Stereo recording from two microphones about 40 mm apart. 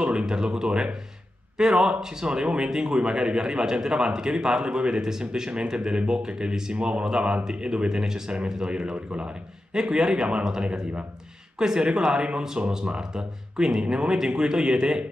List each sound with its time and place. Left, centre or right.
0.0 s speech: right
8.9 s a man's voice: right
9.7 s a man's voice: centre